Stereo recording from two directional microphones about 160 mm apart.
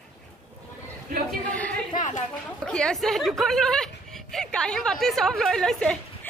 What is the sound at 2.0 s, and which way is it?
Speech, 50° left (ahead or behind).